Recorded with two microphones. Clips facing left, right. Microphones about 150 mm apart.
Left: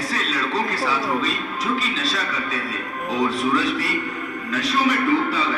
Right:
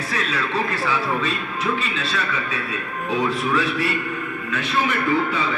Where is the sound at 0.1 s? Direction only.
30° left (ahead or behind).